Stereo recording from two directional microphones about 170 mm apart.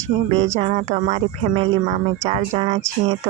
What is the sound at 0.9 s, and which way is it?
Speech, 40° right (ahead or behind).